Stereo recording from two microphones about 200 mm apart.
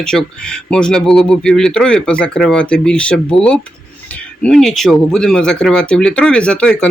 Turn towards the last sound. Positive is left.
turn(degrees=5)  # may be behind; listen again after turning